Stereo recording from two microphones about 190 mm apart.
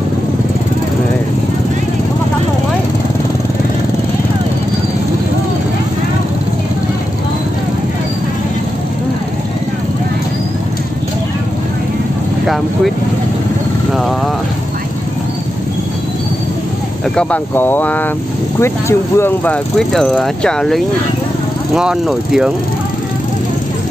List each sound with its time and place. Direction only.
13.9 s speech: centre (ahead or behind)
17.1 s speech: 5° left (ahead or behind)